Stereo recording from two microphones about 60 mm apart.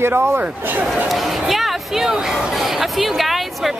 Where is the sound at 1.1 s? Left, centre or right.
Centre.